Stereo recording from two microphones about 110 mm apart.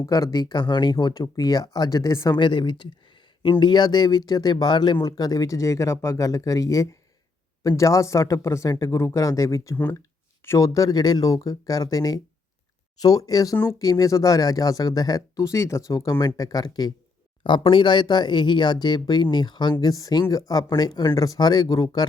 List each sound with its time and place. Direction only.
0.0 s speech: 30° left (ahead or behind)
2.4 s speech: 45° left (ahead or behind); by 10.7 s 25° left (ahead or behind)
10.7 s speech: 35° left (ahead or behind)
17.4 s speech: 50° left (ahead or behind)